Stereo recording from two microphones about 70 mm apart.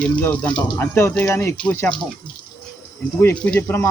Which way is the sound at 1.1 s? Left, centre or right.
Left.